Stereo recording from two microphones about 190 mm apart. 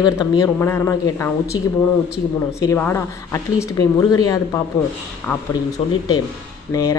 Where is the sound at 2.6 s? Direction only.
15° left (ahead or behind).